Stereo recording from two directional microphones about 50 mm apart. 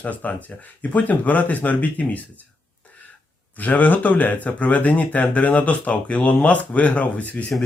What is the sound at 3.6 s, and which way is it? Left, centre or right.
Speech, left.